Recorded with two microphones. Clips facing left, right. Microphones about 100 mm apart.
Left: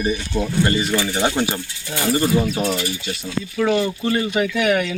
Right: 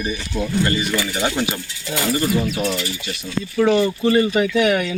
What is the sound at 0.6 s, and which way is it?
Speech, 25° left (ahead or behind).